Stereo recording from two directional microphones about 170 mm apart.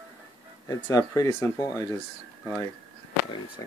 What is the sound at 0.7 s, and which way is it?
Speech, 20° left (ahead or behind).